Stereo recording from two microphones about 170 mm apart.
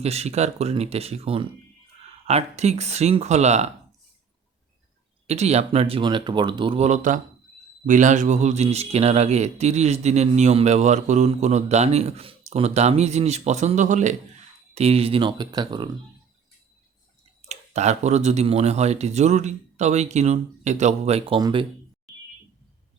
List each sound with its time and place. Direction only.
0.0 s speech: 40° right (ahead or behind)
5.3 s speech: 40° right (ahead or behind)
17.5 s speech: 40° right (ahead or behind)